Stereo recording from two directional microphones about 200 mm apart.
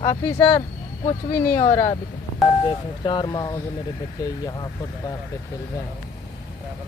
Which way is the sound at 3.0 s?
20° left (ahead or behind).